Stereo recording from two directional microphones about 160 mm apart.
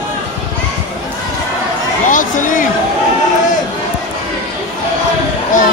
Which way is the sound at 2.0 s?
55° left (ahead or behind).